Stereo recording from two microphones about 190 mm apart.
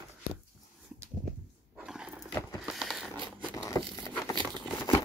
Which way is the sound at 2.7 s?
Centre (ahead or behind).